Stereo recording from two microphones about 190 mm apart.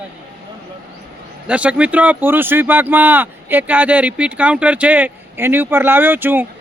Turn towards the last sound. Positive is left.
turn(degrees=-10)  # may be behind; listen again after turning